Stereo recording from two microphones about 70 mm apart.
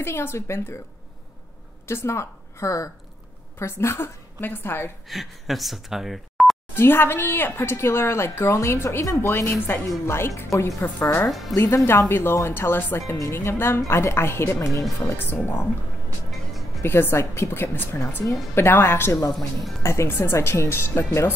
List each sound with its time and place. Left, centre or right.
0.0 s speech: left
1.9 s a woman's voice: left
5.0 s speech: centre
6.7 s a woman's voice: left
11.2 s speech: centre
11.6 s speech: left
15.1 s speech: left
16.3 s music: centre
16.8 s speech: left
19.3 s speech: centre
19.8 s speech: left